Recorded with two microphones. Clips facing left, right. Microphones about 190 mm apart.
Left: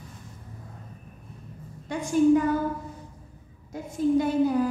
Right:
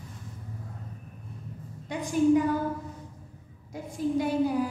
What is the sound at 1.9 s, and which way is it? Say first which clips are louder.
Speech: left 3 dB; 15° right (ahead or behind).